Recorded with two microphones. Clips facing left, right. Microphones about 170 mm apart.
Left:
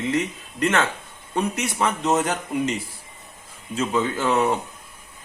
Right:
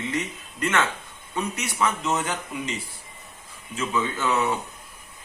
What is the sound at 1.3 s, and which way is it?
A man's voice, 35° left (ahead or behind).